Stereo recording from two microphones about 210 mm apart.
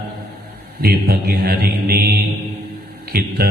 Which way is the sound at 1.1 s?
45° right (ahead or behind).